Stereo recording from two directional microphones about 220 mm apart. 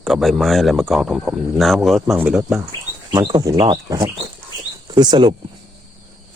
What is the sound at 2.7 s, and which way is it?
Speech, 20° right (ahead or behind).